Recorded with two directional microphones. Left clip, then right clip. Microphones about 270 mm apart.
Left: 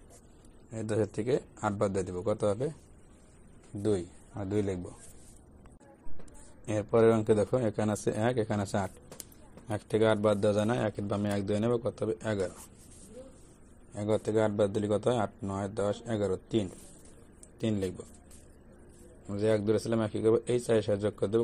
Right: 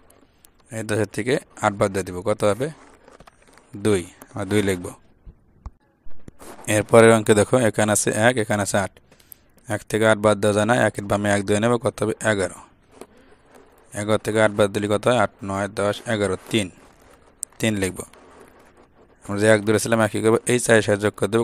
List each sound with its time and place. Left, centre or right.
0.7 s speech: right
3.8 s speech: right
6.6 s speech: right
13.9 s speech: right
17.6 s speech: right
19.4 s speech: right